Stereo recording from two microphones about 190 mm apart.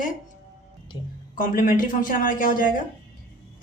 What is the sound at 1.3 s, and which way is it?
Speech, 45° left (ahead or behind).